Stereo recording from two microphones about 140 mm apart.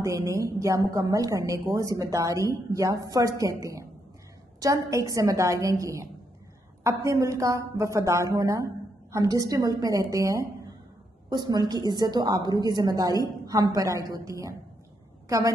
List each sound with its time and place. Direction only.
0.0 s a woman's voice: 20° right (ahead or behind)